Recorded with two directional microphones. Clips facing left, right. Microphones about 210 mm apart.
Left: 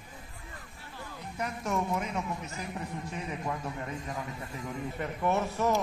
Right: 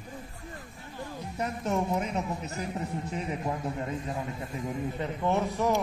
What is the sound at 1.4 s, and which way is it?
A woman's voice, 30° right (ahead or behind).